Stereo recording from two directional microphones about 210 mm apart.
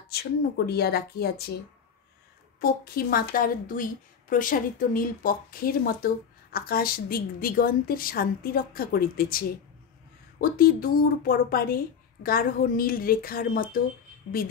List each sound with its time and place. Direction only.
0.1 s speech: 50° left (ahead or behind)
2.6 s speech: 45° left (ahead or behind)
10.4 s speech: 45° left (ahead or behind)